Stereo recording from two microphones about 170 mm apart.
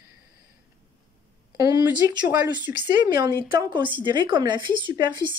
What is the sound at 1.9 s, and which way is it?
Speech, 10° right (ahead or behind).